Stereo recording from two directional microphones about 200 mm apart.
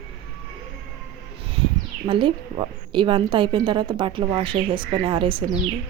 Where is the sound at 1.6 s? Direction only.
25° right (ahead or behind).